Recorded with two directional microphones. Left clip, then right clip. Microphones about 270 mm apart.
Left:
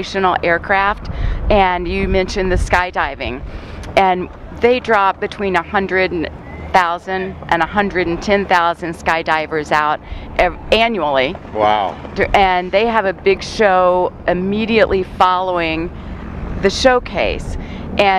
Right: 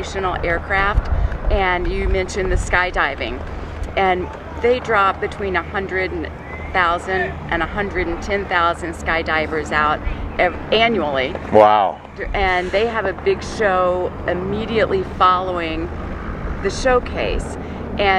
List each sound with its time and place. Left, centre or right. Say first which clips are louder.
0.0 s speech: left 6 dB; left
11.5 s speech: right 4 dB; right
12.2 s speech: left 7 dB; left